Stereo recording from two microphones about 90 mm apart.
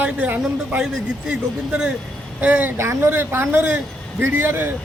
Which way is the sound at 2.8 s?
30° right (ahead or behind).